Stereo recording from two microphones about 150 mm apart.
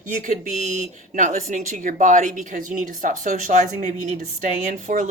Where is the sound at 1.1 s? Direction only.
60° right (ahead or behind).